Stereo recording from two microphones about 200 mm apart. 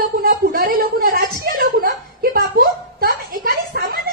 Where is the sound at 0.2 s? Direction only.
45° right (ahead or behind).